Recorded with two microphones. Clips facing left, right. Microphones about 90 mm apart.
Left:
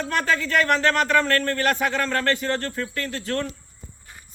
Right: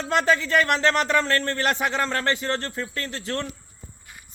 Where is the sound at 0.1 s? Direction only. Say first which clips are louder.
Right 3 dB; 20° right (ahead or behind).